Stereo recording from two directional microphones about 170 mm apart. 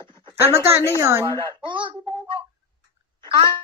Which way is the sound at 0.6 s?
15° right (ahead or behind).